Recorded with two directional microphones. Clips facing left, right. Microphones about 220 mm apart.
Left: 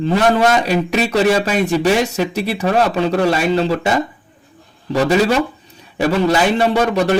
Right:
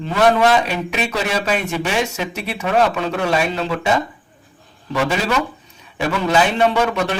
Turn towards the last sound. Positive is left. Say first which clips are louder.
# left 4 dB
turn(degrees=35)  # may be behind; listen again after turning